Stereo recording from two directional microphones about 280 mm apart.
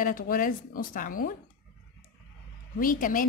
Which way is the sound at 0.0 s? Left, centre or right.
Left.